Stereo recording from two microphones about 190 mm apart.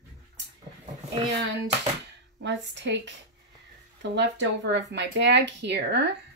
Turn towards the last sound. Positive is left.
turn(degrees=-65)  # may be behind; listen again after turning